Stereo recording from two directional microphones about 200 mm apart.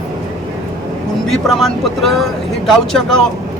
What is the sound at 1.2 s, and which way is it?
Speech, centre (ahead or behind).